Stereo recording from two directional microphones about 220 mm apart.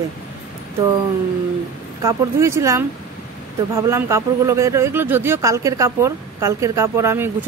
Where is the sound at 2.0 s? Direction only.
15° right (ahead or behind).